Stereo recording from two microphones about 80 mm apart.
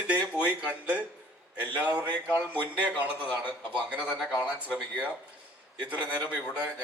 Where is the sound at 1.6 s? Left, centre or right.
Centre.